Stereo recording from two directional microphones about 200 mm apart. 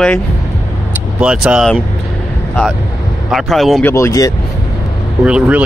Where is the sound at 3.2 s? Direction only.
Centre (ahead or behind).